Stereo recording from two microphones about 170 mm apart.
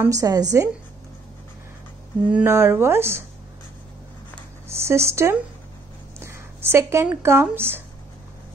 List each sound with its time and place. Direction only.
0.0 s a woman's voice: 20° right (ahead or behind)
2.3 s speech: 15° right (ahead or behind)
4.6 s speech: 15° right (ahead or behind)
6.1 s a sound: 15° right (ahead or behind)
7.4 s speech: 10° right (ahead or behind)